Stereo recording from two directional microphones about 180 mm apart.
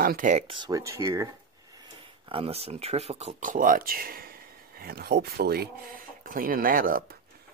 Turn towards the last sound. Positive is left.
turn(degrees=-50)  # may be behind; listen again after turning